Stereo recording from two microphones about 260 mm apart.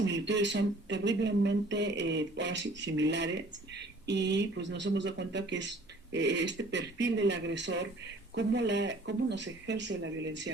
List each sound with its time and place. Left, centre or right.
0.0 s speech: right